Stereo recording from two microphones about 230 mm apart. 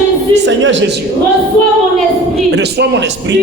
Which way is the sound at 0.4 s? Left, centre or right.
Right.